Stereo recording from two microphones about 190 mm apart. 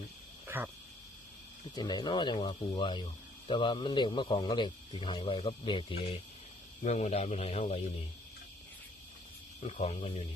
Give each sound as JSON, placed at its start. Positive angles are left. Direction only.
{"t": 0.4, "sound": "frog", "side_deg": -10}
{"t": 1.7, "sound": "speech", "side_deg": 20}
{"t": 9.6, "sound": "speech", "side_deg": 35}